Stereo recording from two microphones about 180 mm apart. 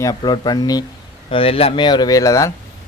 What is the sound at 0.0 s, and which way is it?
A man's voice, 20° left (ahead or behind).